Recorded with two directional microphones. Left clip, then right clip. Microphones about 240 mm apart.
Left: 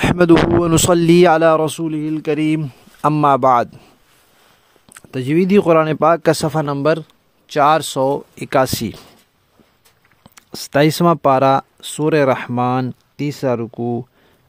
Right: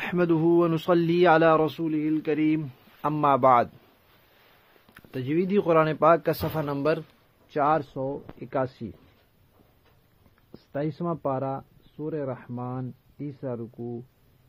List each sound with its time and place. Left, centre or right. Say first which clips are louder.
0.0 s speech: left 12 dB; left
4.9 s speech: left 10 dB; left
8.0 s speech: left 15 dB; left
10.5 s speech: left 17 dB; left